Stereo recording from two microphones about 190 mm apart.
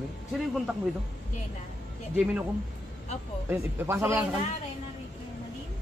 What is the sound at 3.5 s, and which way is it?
Speech, 10° right (ahead or behind).